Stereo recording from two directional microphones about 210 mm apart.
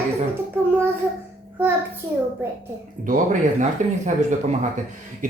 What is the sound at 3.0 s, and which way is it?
A man's voice, 40° right (ahead or behind).